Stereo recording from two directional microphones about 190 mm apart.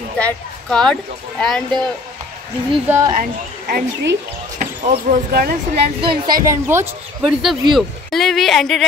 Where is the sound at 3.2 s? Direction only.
50° right (ahead or behind).